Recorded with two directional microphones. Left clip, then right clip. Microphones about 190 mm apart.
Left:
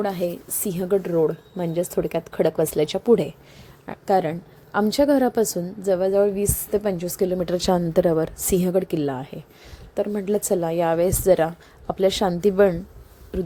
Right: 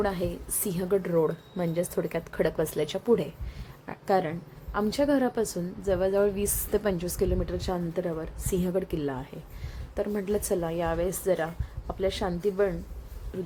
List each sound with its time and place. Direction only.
0.0 s a woman's voice: 20° left (ahead or behind)
7.3 s a woman's voice: 35° left (ahead or behind)
13.3 s a sound: 30° left (ahead or behind)